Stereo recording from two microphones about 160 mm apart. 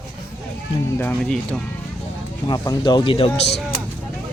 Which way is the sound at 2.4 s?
25° left (ahead or behind).